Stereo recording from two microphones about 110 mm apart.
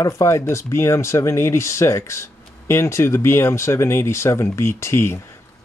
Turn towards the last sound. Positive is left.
turn(degrees=25)  # may be behind; listen again after turning